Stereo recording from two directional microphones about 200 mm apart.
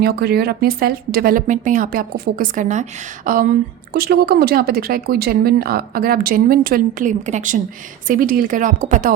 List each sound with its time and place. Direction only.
0.0 s speech: 50° right (ahead or behind)